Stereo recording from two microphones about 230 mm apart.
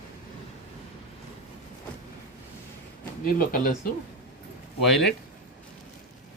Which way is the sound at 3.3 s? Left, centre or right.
Left.